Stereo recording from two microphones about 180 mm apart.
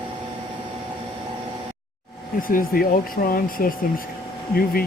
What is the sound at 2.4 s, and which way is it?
Speech, 50° left (ahead or behind).